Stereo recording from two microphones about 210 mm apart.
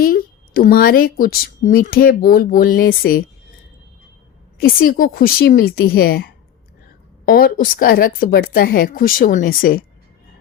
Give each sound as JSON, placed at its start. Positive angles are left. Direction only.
{"t": 0.0, "sound": "speech", "side_deg": 45}
{"t": 4.6, "sound": "speech", "side_deg": 45}